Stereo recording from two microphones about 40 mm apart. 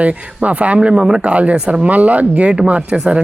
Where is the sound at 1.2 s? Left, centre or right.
Right.